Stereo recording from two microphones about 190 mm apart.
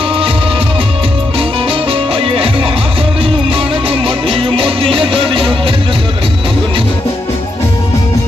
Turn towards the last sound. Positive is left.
turn(degrees=-25)  # may be behind; listen again after turning